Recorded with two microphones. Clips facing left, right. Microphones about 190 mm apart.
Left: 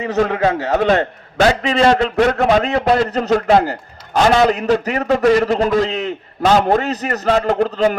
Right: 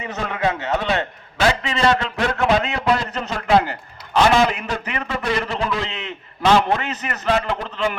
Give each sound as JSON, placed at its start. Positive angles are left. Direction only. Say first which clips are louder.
{"t": 0.0, "sound": "a man's voice", "louder": "left 7 dB", "side_deg": 35}